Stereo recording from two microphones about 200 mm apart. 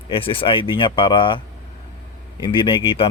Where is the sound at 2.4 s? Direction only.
25° left (ahead or behind).